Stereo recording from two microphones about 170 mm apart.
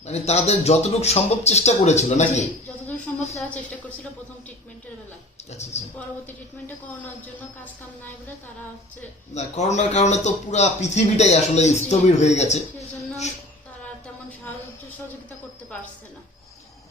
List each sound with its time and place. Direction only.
0.0 s a man's voice: 40° left (ahead or behind)
3.3 s a woman's voice: 10° left (ahead or behind)
5.5 s a man's voice: 40° left (ahead or behind)
9.3 s a man's voice: 40° left (ahead or behind)